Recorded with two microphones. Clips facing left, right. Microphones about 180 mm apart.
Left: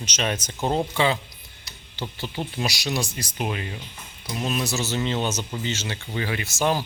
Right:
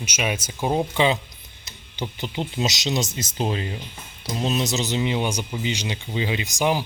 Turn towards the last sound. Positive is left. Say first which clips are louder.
# right 1 dB
turn(degrees=-15)  # may be behind; listen again after turning